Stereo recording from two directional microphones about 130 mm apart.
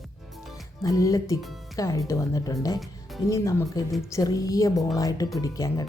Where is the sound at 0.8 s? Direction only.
25° left (ahead or behind).